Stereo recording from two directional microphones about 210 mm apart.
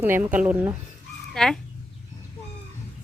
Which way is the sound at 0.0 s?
10° right (ahead or behind).